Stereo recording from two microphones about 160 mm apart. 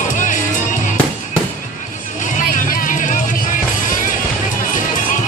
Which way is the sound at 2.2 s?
55° left (ahead or behind).